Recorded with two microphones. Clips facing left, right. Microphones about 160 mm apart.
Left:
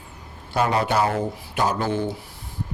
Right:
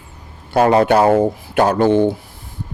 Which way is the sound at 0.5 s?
80° right.